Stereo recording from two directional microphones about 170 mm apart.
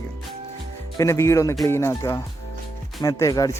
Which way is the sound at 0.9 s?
15° left (ahead or behind).